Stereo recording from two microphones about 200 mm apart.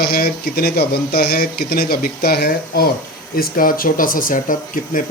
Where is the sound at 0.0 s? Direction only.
50° left (ahead or behind).